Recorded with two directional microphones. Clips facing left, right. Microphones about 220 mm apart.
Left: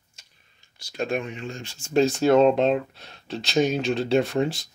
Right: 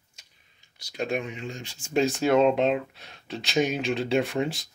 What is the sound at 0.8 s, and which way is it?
Speech, 15° right (ahead or behind).